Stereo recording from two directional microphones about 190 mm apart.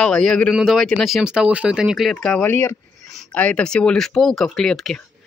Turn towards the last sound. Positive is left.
turn(degrees=5)  # may be behind; listen again after turning